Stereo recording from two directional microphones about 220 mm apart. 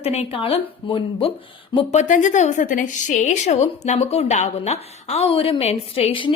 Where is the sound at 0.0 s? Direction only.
30° left (ahead or behind).